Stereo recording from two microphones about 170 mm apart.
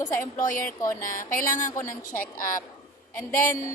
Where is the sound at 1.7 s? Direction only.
15° left (ahead or behind).